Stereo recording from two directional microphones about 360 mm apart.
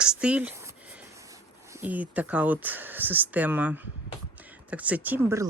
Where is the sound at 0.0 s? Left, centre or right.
Centre.